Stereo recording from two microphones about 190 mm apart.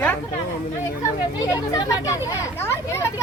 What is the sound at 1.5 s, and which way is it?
Speech, 20° left (ahead or behind).